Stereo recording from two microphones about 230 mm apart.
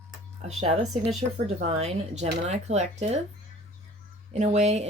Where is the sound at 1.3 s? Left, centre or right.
Right.